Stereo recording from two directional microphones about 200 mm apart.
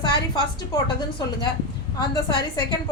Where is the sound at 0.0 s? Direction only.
20° left (ahead or behind).